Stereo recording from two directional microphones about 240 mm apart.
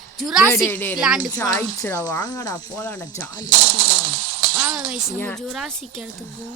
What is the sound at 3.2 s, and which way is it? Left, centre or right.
Speech, centre.